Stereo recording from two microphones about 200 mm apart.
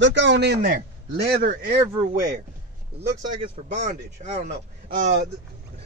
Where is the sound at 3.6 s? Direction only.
35° right (ahead or behind).